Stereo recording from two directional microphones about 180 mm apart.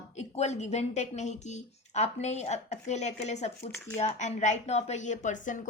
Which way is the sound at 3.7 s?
10° left (ahead or behind).